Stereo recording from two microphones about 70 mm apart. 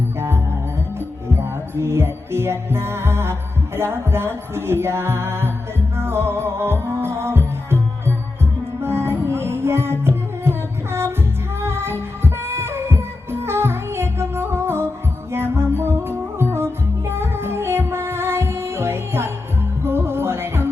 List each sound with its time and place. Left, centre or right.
0.2 s music: right
11.6 s music: right